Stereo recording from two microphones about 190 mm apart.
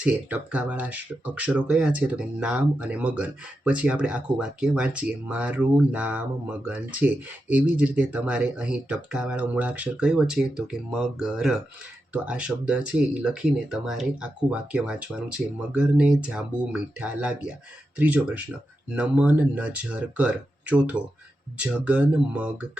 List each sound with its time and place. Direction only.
0.0 s speech: 5° right (ahead or behind)